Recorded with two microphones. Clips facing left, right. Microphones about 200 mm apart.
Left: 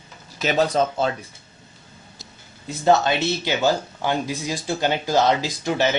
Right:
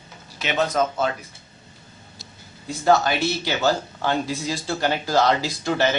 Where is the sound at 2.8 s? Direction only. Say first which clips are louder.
Left 1 dB; 25° left (ahead or behind).